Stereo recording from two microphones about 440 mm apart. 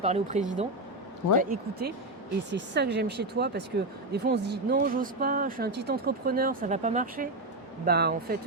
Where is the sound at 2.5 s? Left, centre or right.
Right.